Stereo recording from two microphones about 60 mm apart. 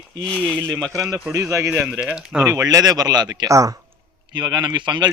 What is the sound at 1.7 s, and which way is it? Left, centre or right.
Speech, right.